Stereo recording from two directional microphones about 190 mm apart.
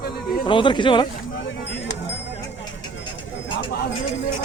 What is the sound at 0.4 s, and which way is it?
Speech, 25° left (ahead or behind).